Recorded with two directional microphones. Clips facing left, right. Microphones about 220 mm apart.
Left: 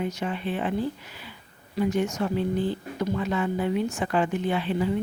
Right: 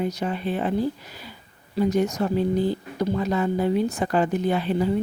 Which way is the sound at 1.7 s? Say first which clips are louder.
Right 3 dB; 40° right (ahead or behind).